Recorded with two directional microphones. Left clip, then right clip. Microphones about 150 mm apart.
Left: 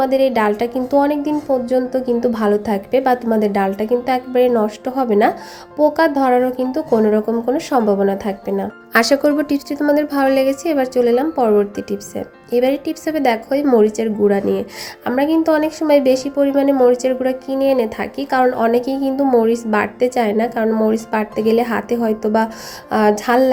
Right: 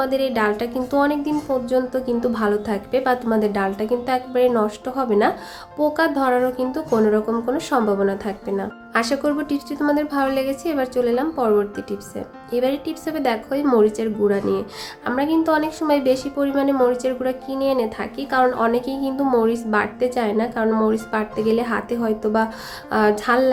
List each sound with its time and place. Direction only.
0.0 s a woman's voice: 15° left (ahead or behind)